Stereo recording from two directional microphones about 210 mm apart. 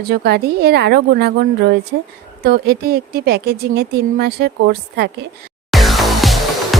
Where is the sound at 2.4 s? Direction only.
50° right (ahead or behind).